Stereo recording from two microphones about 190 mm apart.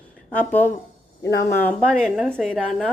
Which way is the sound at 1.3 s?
55° left (ahead or behind).